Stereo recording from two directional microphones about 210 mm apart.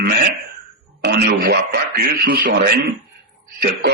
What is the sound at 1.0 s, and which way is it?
Speech, 50° right (ahead or behind).